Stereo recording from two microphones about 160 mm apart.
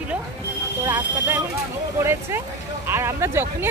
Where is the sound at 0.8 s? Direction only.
10° right (ahead or behind).